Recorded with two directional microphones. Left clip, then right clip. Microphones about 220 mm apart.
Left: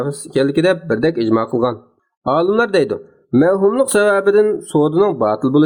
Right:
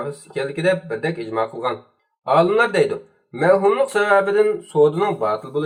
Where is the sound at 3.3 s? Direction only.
40° left (ahead or behind).